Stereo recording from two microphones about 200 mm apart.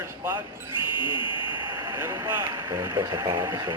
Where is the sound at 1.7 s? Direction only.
20° right (ahead or behind).